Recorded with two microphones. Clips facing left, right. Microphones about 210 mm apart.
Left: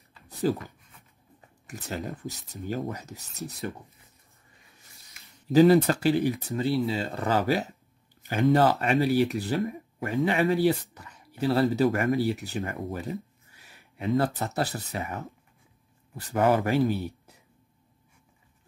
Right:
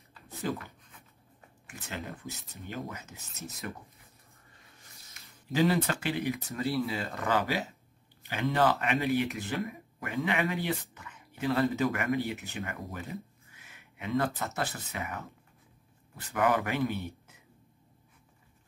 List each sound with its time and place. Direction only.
0.5 s speech: 35° left (ahead or behind)
1.7 s speech: 35° left (ahead or behind)
5.5 s speech: 40° left (ahead or behind)